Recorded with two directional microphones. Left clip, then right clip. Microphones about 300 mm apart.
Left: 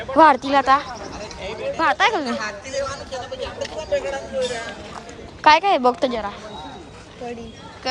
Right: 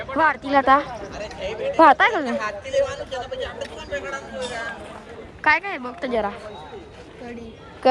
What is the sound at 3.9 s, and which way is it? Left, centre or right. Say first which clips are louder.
Speech: left 7 dB; centre.